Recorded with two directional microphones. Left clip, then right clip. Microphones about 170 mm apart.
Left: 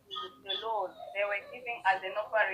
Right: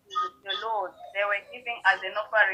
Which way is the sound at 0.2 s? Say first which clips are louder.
Right 8 dB; 40° right (ahead or behind).